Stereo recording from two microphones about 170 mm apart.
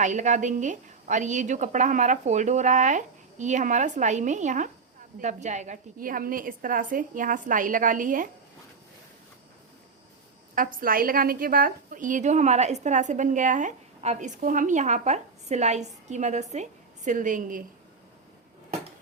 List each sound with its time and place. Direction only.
0.0 s a woman's voice: 45° right (ahead or behind)
10.7 s a woman's voice: 55° right (ahead or behind)